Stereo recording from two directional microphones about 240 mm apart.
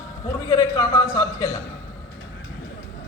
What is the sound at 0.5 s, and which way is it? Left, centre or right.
Speech, centre.